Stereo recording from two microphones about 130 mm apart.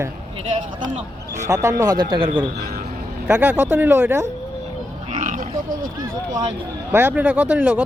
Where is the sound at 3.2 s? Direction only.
15° right (ahead or behind).